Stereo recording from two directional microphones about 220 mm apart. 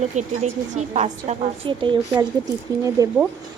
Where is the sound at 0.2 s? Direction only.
30° right (ahead or behind).